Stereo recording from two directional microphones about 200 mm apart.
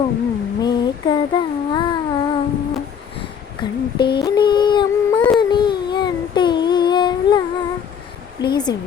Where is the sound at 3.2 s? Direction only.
25° left (ahead or behind).